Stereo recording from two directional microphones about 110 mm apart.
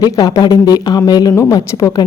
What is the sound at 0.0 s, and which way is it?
A woman's voice, 35° left (ahead or behind).